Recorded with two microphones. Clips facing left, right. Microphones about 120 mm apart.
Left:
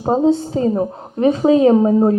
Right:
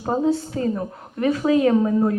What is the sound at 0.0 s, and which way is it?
A woman's voice, 25° left (ahead or behind).